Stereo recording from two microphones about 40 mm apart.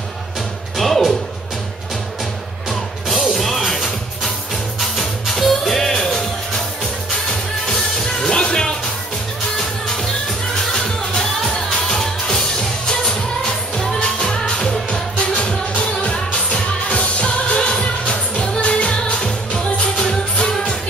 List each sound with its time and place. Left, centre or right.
0.7 s music: centre
3.1 s music: centre
10.7 s music: centre
15.1 s music: left